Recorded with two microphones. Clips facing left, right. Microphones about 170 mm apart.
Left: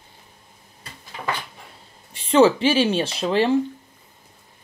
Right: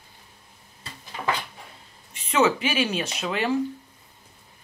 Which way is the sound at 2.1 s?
30° left (ahead or behind).